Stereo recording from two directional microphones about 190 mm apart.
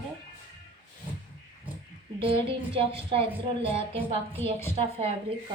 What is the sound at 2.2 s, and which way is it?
A woman's voice, 30° right (ahead or behind).